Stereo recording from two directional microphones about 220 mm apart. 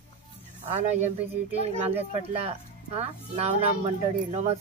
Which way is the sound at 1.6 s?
30° right (ahead or behind).